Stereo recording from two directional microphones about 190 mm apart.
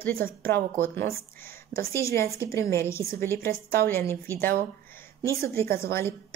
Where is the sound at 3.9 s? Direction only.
10° left (ahead or behind).